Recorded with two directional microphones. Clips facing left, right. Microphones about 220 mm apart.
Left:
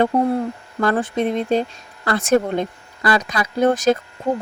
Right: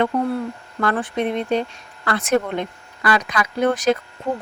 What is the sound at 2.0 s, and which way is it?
Speech, 45° left (ahead or behind).